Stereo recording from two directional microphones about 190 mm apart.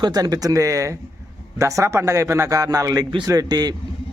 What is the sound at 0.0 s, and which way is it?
Speech, 20° right (ahead or behind).